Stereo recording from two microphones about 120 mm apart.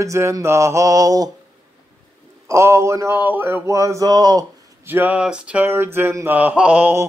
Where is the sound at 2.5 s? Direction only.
25° right (ahead or behind).